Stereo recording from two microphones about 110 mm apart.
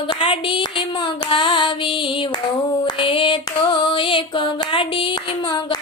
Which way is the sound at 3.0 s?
55° left (ahead or behind).